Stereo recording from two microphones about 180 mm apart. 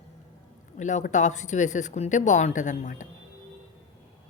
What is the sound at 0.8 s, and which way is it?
Speech, 40° left (ahead or behind).